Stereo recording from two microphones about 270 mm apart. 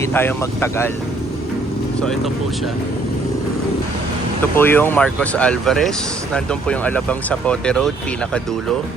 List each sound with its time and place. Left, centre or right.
0.0 s speech: centre
4.5 s speech: centre